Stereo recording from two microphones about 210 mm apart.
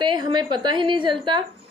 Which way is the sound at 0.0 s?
20° right (ahead or behind).